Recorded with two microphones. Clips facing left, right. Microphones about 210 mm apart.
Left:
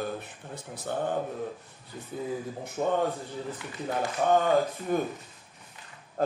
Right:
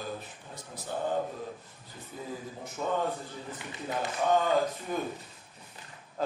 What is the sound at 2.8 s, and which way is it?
Speech, 45° left (ahead or behind).